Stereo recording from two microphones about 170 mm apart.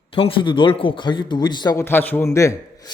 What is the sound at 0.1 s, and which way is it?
A man's voice, 30° left (ahead or behind).